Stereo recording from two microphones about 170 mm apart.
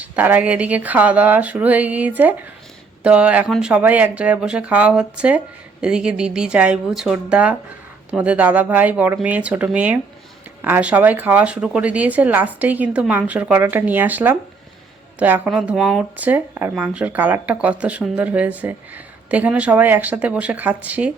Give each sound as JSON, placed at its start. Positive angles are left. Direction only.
{"t": 0.0, "sound": "speech", "side_deg": -10}